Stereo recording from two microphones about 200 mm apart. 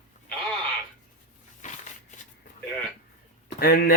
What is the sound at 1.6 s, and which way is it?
Crushing, 35° left (ahead or behind).